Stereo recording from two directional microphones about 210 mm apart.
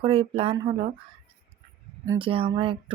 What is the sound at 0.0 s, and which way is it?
Speech, 25° right (ahead or behind).